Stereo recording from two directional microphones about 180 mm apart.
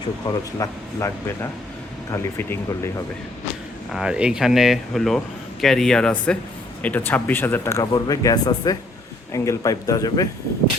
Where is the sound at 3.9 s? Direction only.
5° right (ahead or behind).